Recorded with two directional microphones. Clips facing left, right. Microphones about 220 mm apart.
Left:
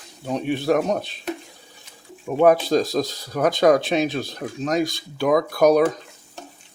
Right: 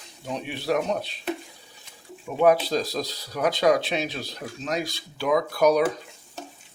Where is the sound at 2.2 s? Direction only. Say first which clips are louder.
Left 3 dB; 50° left (ahead or behind).